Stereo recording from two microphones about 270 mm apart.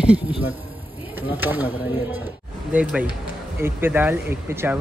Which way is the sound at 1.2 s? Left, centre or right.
Centre.